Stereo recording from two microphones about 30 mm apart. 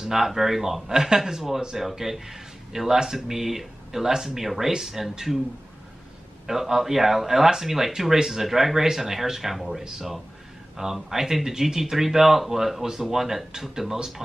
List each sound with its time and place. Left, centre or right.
0.1 s speech: centre
6.4 s speech: centre